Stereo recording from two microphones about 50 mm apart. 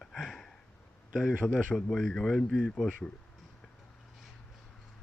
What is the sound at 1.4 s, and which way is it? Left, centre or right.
A man's voice, centre.